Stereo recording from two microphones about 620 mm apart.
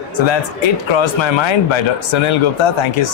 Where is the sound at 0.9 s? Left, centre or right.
Left.